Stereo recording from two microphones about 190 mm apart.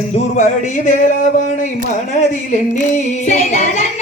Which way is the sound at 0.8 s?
40° left (ahead or behind).